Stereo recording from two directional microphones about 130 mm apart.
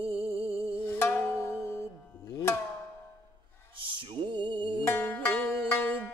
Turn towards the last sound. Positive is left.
turn(degrees=15)  # may be behind; listen again after turning